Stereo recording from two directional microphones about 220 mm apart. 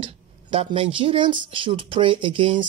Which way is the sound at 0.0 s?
25° right (ahead or behind).